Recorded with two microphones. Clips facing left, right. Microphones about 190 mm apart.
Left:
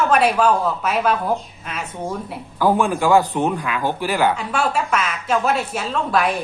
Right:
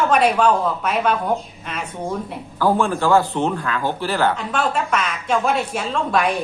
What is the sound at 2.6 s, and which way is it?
Speech, 15° left (ahead or behind).